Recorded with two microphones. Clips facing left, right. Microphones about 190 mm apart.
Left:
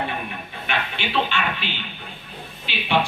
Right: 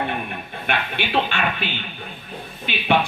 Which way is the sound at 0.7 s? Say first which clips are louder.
Right 3 dB; 50° right (ahead or behind).